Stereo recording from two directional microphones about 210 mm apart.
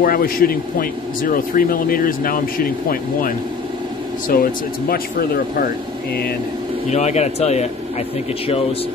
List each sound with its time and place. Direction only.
0.0 s speech: 45° left (ahead or behind)
6.9 s speech: 35° left (ahead or behind)